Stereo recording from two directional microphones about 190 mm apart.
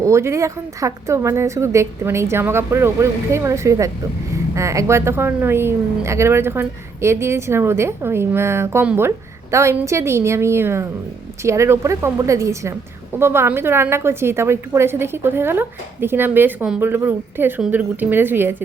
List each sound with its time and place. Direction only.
0.0 s a woman's voice: 15° right (ahead or behind)